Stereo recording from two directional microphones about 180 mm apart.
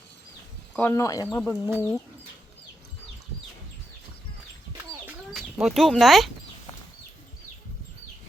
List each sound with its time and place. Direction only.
0.7 s speech: 10° left (ahead or behind)
5.3 s speech: centre (ahead or behind)